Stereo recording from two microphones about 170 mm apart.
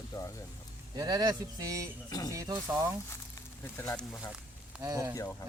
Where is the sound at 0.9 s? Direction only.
25° right (ahead or behind).